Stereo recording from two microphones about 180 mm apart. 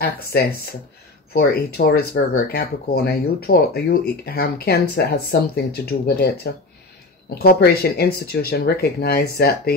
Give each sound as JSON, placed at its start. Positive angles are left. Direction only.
{"t": 0.0, "sound": "speech", "side_deg": 60}